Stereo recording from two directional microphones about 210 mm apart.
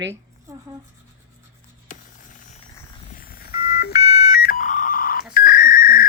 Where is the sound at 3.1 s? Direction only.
45° left (ahead or behind).